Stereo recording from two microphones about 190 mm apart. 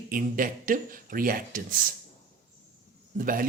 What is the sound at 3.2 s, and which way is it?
Speech, 45° right (ahead or behind).